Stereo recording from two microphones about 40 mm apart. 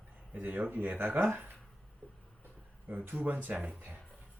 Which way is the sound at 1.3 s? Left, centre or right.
Right.